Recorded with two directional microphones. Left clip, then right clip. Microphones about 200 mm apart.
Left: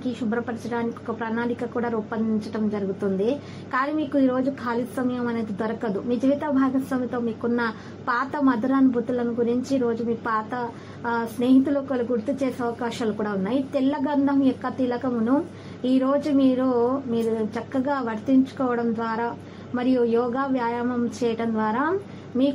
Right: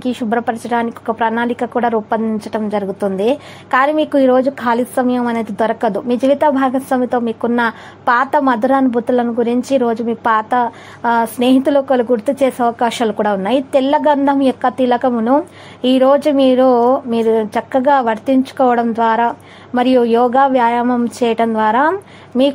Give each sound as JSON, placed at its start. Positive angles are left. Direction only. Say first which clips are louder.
{"t": 0.3, "sound": "a woman's voice", "louder": "right 13 dB", "side_deg": -45}